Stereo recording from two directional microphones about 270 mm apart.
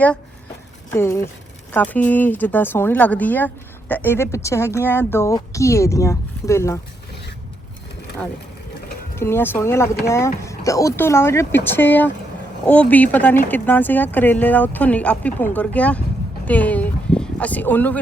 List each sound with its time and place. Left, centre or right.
0.9 s speech: centre
9.1 s speech: centre
16.5 s a sound: centre